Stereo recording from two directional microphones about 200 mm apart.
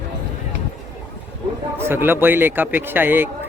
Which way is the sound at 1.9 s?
10° right (ahead or behind).